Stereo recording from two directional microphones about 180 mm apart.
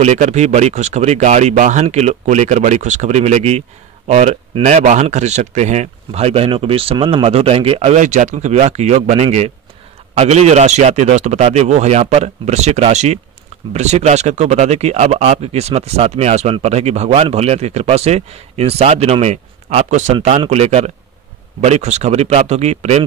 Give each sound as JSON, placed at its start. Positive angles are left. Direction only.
{"t": 0.0, "sound": "speech", "side_deg": -40}